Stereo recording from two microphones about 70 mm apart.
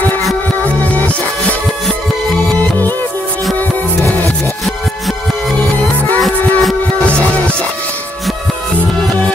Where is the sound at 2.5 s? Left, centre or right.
Left.